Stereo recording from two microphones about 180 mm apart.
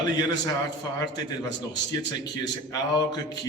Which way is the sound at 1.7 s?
25° left (ahead or behind).